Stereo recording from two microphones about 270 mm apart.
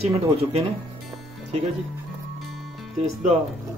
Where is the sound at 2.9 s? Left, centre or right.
Right.